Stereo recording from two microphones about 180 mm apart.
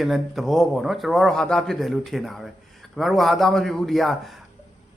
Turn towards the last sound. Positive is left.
turn(degrees=0)  # may be behind; listen again after turning